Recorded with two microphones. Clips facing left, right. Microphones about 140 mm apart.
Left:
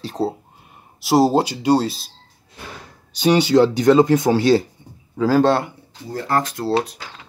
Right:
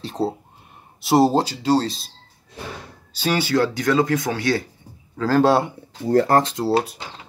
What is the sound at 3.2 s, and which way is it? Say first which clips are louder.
Speech: left 6 dB; 20° left (ahead or behind).